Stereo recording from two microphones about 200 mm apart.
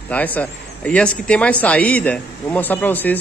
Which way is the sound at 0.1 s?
10° left (ahead or behind).